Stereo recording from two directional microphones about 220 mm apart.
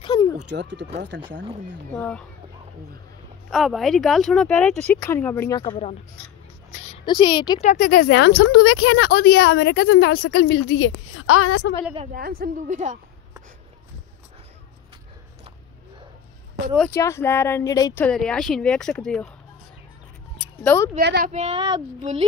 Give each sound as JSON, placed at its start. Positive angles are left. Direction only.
{"t": 0.0, "sound": "a sound", "side_deg": 15}
{"t": 0.5, "sound": "speech", "side_deg": -50}
{"t": 2.0, "sound": "speech", "side_deg": 5}
{"t": 3.4, "sound": "speech", "side_deg": 0}
{"t": 7.1, "sound": "speech", "side_deg": 20}
{"t": 7.6, "sound": "a woman's voice", "side_deg": 35}
{"t": 8.4, "sound": "a woman's voice", "side_deg": 65}
{"t": 11.2, "sound": "a woman's voice", "side_deg": 80}
{"t": 12.1, "sound": "a woman's voice", "side_deg": -40}
{"t": 16.7, "sound": "speech", "side_deg": 10}
{"t": 18.0, "sound": "speech", "side_deg": 5}
{"t": 20.6, "sound": "speech", "side_deg": 10}
{"t": 21.0, "sound": "speech", "side_deg": -50}
{"t": 21.3, "sound": "speech", "side_deg": -30}